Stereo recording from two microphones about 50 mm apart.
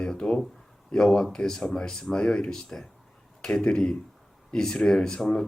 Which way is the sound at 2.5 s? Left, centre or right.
Centre.